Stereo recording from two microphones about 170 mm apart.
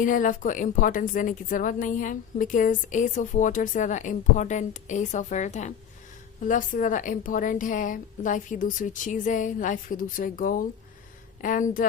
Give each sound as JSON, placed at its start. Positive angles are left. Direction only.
{"t": 0.0, "sound": "a woman's voice", "side_deg": 50}